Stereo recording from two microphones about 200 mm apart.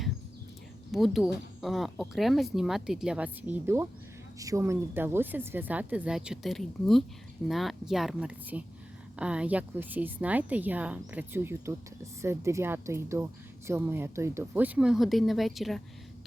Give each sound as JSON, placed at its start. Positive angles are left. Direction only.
{"t": 0.9, "sound": "a woman's voice", "side_deg": 0}